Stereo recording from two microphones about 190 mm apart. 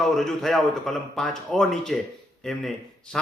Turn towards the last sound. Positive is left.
turn(degrees=0)  # may be behind; listen again after turning